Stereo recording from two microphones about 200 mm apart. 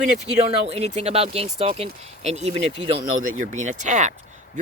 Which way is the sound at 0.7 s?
30° right (ahead or behind).